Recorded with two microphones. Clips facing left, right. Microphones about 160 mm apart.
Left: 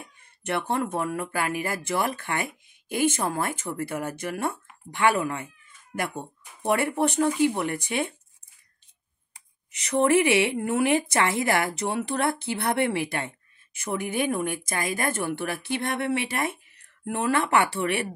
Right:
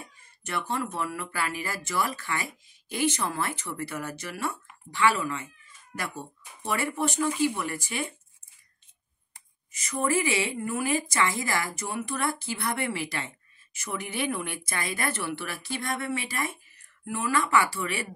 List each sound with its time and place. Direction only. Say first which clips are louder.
0.2 s speech: left 5 dB; 60° left (ahead or behind)
9.7 s speech: left 7 dB; 70° left (ahead or behind)